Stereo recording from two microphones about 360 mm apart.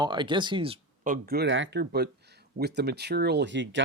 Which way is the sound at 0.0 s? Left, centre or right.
Centre.